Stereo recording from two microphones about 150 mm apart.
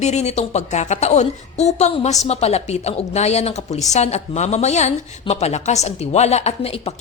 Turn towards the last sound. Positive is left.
turn(degrees=45)  # may be behind; listen again after turning